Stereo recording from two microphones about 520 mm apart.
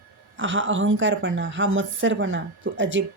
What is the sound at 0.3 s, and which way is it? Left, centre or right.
A woman's voice, right.